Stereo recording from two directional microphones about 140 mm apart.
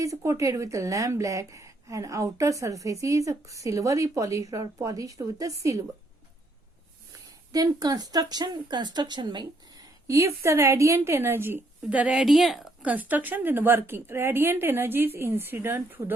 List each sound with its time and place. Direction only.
0.0 s a woman's voice: 25° right (ahead or behind)
7.5 s a woman's voice: 25° right (ahead or behind); by 12.6 s centre (ahead or behind)
12.8 s a woman's voice: 10° right (ahead or behind)